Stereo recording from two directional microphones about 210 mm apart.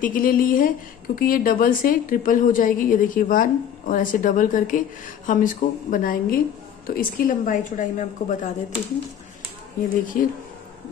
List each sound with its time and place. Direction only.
0.0 s a woman's voice: 40° left (ahead or behind)
9.8 s a woman's voice: 40° left (ahead or behind)